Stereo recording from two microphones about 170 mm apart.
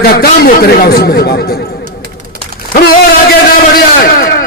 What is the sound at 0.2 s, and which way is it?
A man's voice, 60° left (ahead or behind).